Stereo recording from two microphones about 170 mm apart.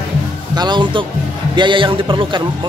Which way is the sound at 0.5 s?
25° right (ahead or behind).